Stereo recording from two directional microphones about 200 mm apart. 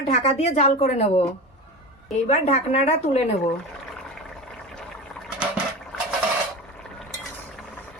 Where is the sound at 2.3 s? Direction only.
35° left (ahead or behind).